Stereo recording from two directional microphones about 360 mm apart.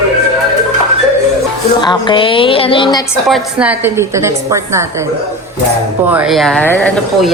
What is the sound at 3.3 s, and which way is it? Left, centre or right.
Speech, centre.